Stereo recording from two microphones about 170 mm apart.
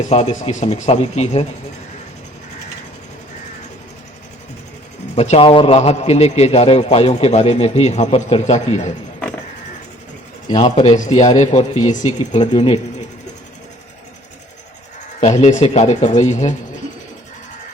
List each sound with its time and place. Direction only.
0.0 s a man's voice: 45° left (ahead or behind)
5.1 s a man's voice: 40° left (ahead or behind)
10.5 s a man's voice: 30° left (ahead or behind)
10.9 s a man's voice: 45° left (ahead or behind)
15.2 s speech: 40° left (ahead or behind)